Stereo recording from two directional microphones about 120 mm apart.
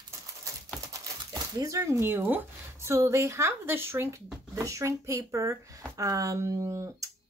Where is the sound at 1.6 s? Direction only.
25° right (ahead or behind).